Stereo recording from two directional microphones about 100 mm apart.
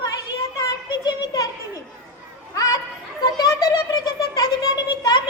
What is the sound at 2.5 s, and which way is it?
Chatter, 40° left (ahead or behind).